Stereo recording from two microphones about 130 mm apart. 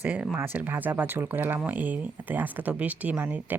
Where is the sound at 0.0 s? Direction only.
15° right (ahead or behind).